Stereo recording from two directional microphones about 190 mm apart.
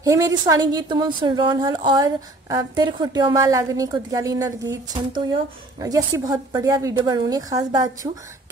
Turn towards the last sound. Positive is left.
turn(degrees=-20)  # may be behind; listen again after turning